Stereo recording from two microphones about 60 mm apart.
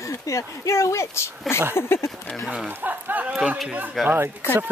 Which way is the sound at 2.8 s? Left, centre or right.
Right.